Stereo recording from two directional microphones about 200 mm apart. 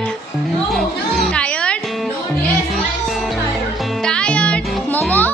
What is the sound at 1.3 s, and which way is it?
Music, 5° left (ahead or behind).